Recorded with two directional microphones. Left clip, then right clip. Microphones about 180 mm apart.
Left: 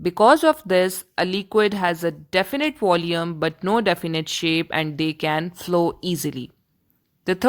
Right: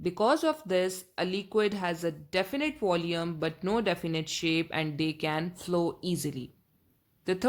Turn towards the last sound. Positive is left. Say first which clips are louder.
# left 7 dB
turn(degrees=35)  # may be behind; listen again after turning